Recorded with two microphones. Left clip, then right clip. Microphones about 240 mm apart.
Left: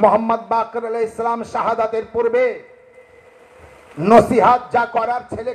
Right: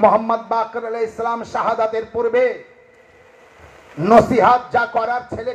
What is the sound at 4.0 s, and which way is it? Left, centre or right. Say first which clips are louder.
A man's voice: even; left.